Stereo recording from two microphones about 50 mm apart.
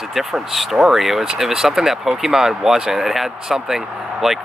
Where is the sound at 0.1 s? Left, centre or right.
Centre.